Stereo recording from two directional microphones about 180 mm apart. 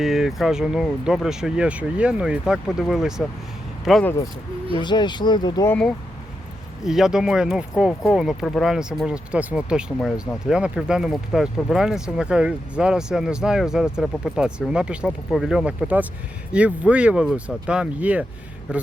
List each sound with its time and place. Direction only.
0.0 s speech: centre (ahead or behind)
4.8 s speech: 25° left (ahead or behind)
5.6 s speech: 5° left (ahead or behind)